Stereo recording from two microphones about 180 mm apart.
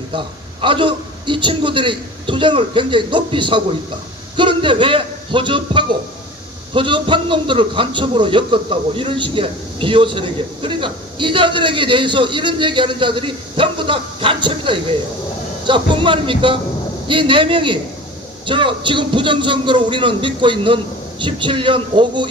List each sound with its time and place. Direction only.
0.1 s a man's voice: 30° right (ahead or behind)